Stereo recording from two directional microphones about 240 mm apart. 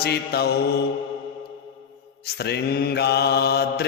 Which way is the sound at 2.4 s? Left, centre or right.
Left.